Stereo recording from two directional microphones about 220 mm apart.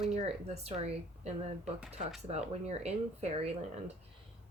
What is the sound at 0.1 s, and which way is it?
A woman's voice, 30° right (ahead or behind).